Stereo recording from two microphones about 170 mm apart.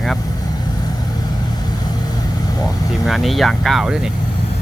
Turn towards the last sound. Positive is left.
turn(degrees=-5)  # may be behind; listen again after turning